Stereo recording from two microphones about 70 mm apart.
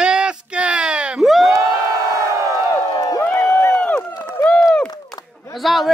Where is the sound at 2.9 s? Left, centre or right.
Left.